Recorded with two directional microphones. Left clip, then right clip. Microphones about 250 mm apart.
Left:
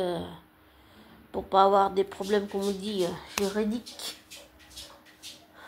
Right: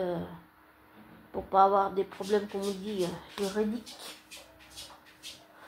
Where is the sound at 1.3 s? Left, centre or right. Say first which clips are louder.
Left 2 dB; left.